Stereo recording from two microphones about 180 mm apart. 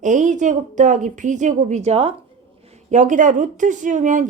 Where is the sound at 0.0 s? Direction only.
45° right (ahead or behind).